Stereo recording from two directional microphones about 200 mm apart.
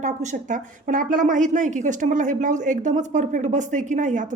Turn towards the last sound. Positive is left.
turn(degrees=-40)  # may be behind; listen again after turning